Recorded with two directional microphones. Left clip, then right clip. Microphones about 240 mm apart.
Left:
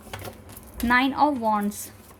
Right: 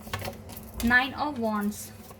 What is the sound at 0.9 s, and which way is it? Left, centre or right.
Speech, left.